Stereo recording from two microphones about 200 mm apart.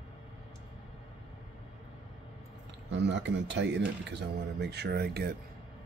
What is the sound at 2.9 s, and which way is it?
Speech, 60° right (ahead or behind).